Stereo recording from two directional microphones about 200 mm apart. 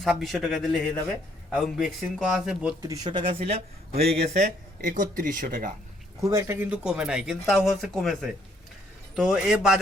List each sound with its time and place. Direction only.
0.0 s speech: centre (ahead or behind)
2.8 s speech: 20° right (ahead or behind); by 5.7 s 40° right (ahead or behind)
6.1 s speech: 15° right (ahead or behind)